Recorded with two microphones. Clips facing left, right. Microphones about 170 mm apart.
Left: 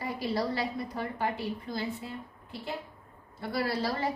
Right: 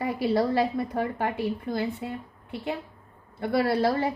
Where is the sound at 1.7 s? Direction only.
65° right (ahead or behind).